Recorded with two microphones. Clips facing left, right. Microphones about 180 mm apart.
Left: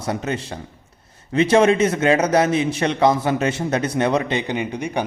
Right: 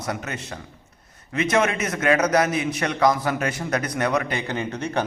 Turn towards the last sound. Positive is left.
turn(degrees=15)  # may be behind; listen again after turning